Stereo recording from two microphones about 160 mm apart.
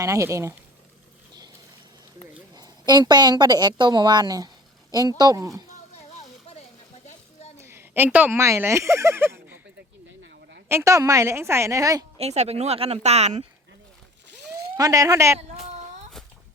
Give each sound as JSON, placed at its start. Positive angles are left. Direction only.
{"t": 0.0, "sound": "a woman's voice", "side_deg": -20}
{"t": 2.6, "sound": "a woman's voice", "side_deg": -25}
{"t": 5.9, "sound": "a sound", "side_deg": 45}
{"t": 7.6, "sound": "speech", "side_deg": -15}
{"t": 10.7, "sound": "a woman's voice", "side_deg": -20}
{"t": 12.2, "sound": "speech", "side_deg": -40}
{"t": 14.8, "sound": "a woman's voice", "side_deg": -20}